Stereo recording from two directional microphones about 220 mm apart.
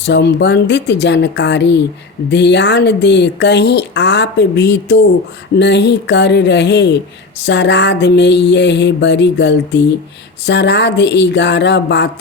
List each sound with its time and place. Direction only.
0.0 s speech: 50° left (ahead or behind)